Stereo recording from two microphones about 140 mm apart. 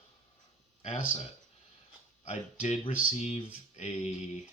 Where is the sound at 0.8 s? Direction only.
50° left (ahead or behind).